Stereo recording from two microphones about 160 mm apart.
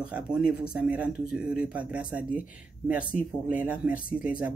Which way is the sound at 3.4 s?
10° right (ahead or behind).